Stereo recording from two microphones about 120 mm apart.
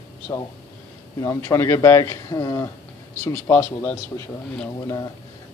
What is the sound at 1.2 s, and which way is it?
Speech, 25° left (ahead or behind).